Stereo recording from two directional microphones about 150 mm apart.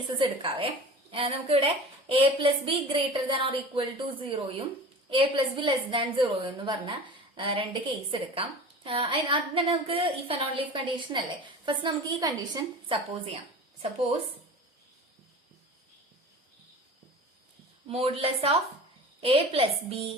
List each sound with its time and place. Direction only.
0.2 s a woman's voice: 35° right (ahead or behind)
17.8 s a woman's voice: 40° right (ahead or behind)